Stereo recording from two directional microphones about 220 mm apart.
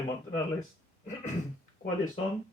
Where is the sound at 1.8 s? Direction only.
40° left (ahead or behind).